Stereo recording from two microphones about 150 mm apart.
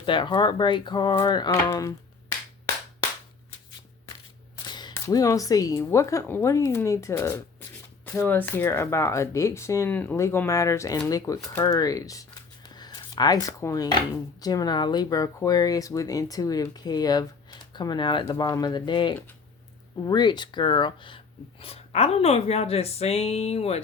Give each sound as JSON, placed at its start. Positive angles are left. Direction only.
{"t": 0.0, "sound": "speech", "side_deg": 35}
{"t": 4.6, "sound": "speech", "side_deg": 30}
{"t": 12.6, "sound": "a sound", "side_deg": 25}
{"t": 14.4, "sound": "speech", "side_deg": 25}